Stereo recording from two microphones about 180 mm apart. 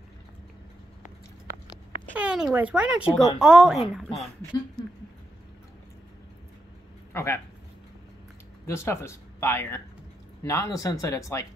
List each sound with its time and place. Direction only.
2.1 s speech: 5° right (ahead or behind)
7.1 s a sound: 15° left (ahead or behind)
8.6 s speech: 15° left (ahead or behind)